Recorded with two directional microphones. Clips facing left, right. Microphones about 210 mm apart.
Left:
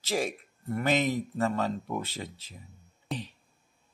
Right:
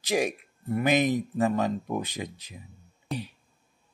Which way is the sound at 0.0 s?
15° right (ahead or behind).